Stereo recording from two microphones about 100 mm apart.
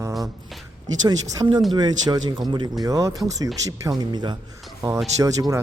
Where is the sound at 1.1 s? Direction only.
40° right (ahead or behind).